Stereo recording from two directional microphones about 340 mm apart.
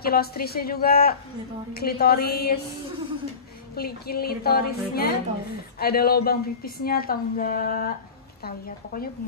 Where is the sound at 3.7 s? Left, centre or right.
Left.